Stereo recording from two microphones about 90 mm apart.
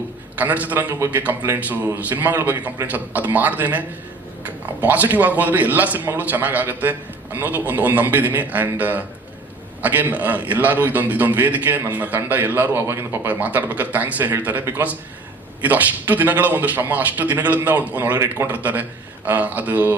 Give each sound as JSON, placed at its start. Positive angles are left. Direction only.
{"t": 0.3, "sound": "a man's voice", "side_deg": -15}